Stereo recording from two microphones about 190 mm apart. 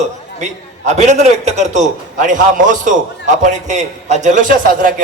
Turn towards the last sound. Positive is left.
turn(degrees=-45)  # may be behind; listen again after turning